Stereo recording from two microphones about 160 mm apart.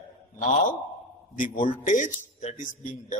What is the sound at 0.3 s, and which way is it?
A man's voice, 50° left (ahead or behind).